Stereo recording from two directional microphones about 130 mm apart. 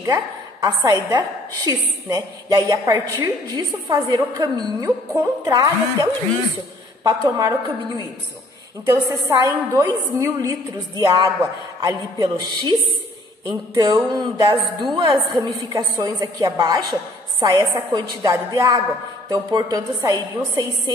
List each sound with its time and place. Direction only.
0.0 s a woman's voice: 30° right (ahead or behind)
8.9 s a woman's voice: 30° right (ahead or behind)